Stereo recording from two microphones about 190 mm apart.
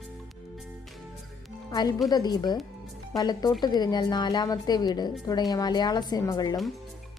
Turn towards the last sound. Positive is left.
turn(degrees=20)  # may be behind; listen again after turning